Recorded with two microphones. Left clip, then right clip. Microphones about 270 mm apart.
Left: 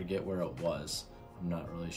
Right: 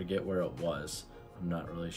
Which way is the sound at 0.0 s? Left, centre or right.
Centre.